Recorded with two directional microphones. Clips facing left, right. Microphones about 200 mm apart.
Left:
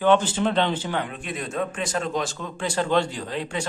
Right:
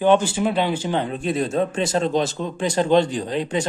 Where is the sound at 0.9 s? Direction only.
30° right (ahead or behind).